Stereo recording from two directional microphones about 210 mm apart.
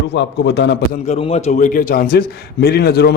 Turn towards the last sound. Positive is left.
turn(degrees=50)  # may be behind; listen again after turning